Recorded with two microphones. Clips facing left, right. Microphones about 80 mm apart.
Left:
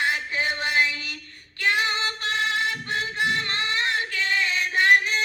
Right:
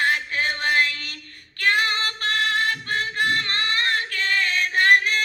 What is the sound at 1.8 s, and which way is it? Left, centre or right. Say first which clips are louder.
Female singing: right 2 dB; centre.